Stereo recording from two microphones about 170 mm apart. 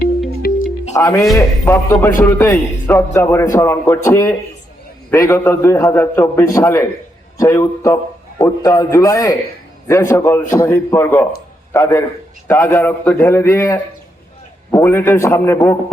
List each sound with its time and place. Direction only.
0.4 s music: 60° left (ahead or behind)
0.9 s a man's voice: 20° left (ahead or behind)